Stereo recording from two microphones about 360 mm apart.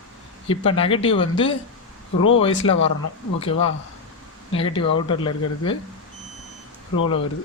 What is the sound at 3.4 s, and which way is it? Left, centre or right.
Speech, centre.